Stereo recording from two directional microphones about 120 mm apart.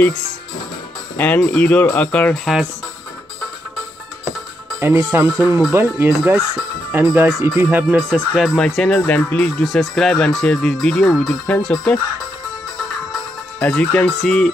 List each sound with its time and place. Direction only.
1.1 s speech: 10° left (ahead or behind)
2.3 s speech: centre (ahead or behind)
4.7 s speech: 20° right (ahead or behind)
6.9 s music: 15° right (ahead or behind)
8.5 s speech: 5° left (ahead or behind)
9.7 s speech: centre (ahead or behind)
13.6 s speech: 10° left (ahead or behind)